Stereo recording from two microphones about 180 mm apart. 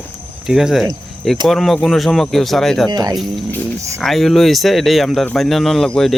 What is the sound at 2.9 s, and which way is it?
Speech, 20° right (ahead or behind).